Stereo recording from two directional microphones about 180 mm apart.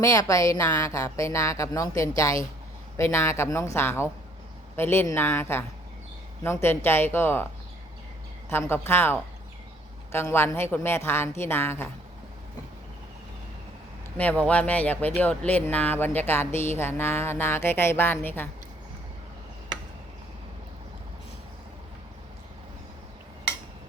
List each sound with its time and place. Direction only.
0.0 s speech: 20° left (ahead or behind)
8.4 s speech: 15° left (ahead or behind)
14.2 s speech: 10° left (ahead or behind)